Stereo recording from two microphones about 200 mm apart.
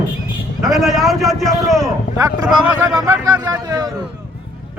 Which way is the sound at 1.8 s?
15° right (ahead or behind).